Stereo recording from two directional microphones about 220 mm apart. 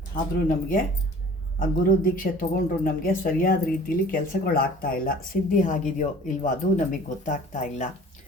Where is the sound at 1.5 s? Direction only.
40° left (ahead or behind).